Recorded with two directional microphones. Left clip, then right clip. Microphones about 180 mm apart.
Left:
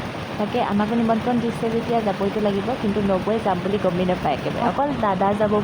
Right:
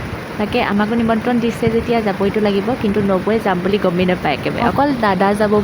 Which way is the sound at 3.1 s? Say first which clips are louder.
Right 4 dB; 35° right (ahead or behind).